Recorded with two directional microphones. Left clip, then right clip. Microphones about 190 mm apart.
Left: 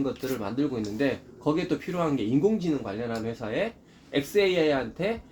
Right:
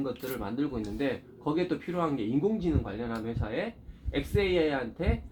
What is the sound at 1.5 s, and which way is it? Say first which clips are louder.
Speech: left 2 dB; 65° left (ahead or behind).